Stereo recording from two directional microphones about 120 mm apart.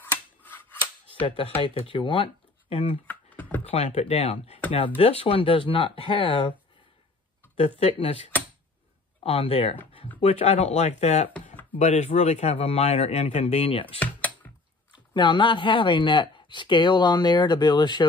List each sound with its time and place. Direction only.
0.0 s scissors: 15° left (ahead or behind)
1.2 s speech: 50° left (ahead or behind)
3.1 s computer keyboard: 15° left (ahead or behind)
3.7 s a man's voice: 60° left (ahead or behind); by 6.5 s 45° left (ahead or behind)
7.5 s a man's voice: 55° left (ahead or behind)
9.2 s a man's voice: 55° left (ahead or behind)
13.9 s computer keyboard: 15° left (ahead or behind)
14.9 s speech: 40° left (ahead or behind)